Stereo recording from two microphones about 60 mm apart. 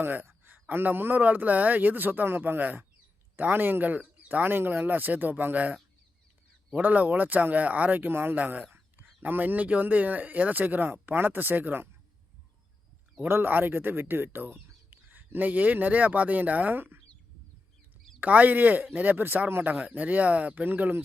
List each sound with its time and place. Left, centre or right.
0.0 s speech: right
13.2 s speech: right
18.2 s speech: right